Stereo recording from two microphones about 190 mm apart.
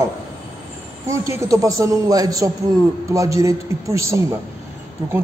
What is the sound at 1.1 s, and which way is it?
A man's voice, 15° right (ahead or behind).